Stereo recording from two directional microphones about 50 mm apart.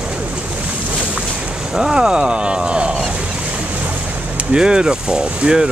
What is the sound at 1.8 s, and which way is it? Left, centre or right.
Speech, centre.